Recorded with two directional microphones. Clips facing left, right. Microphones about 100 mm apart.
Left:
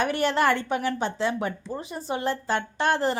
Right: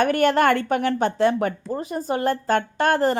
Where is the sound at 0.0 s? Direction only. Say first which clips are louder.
Right 5 dB; 50° right (ahead or behind).